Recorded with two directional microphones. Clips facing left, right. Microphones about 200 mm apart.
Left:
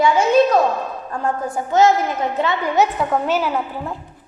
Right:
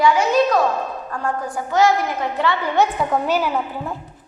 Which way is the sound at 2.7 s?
Centre (ahead or behind).